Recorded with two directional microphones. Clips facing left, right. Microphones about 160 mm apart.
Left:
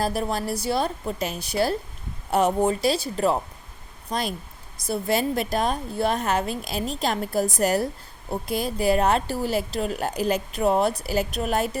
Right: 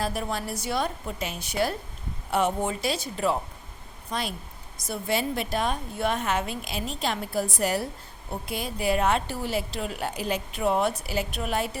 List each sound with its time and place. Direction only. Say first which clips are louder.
0.0 s a woman's voice: left 4 dB; 35° left (ahead or behind)